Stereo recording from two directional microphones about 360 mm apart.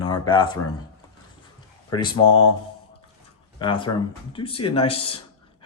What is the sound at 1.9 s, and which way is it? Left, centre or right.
Speech, centre.